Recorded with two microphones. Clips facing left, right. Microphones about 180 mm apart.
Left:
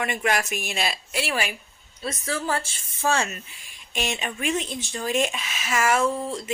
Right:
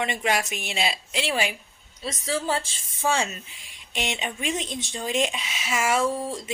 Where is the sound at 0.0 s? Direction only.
20° right (ahead or behind).